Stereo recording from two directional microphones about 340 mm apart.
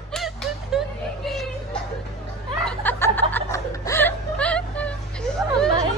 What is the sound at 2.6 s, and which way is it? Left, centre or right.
Snicker, centre.